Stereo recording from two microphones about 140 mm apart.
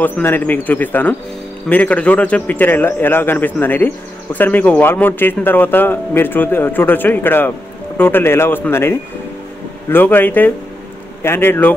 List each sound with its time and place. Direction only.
0.0 s speech: 15° left (ahead or behind)